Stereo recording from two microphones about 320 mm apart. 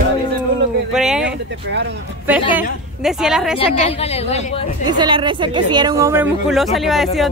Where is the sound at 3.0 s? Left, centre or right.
Centre.